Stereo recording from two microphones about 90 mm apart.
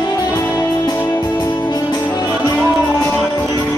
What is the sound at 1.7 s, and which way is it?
Music, 50° left (ahead or behind).